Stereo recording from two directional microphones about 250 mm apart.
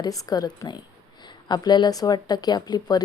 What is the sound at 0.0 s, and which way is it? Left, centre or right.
Speech, centre.